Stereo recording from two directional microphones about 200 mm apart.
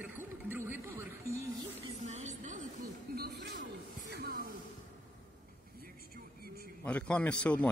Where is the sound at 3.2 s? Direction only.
60° right (ahead or behind).